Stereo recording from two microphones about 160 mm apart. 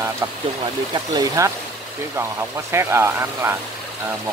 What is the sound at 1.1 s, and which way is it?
Speech, 20° right (ahead or behind).